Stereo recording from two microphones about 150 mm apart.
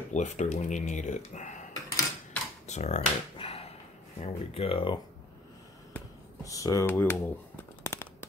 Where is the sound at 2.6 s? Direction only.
50° left (ahead or behind).